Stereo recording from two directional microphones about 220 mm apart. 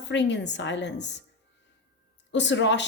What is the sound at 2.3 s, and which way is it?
Speech, 55° left (ahead or behind).